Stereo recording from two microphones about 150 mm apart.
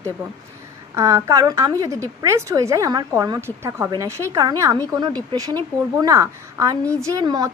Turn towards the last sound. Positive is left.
turn(degrees=-25)  # may be behind; listen again after turning